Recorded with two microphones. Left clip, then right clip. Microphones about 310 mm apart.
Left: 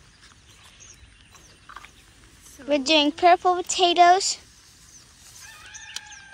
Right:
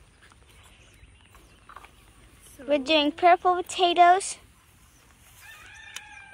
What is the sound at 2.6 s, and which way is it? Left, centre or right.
Speech, centre.